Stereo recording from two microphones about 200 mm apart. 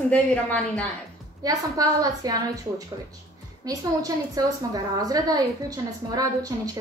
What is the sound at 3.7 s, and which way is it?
A woman's voice, 15° right (ahead or behind).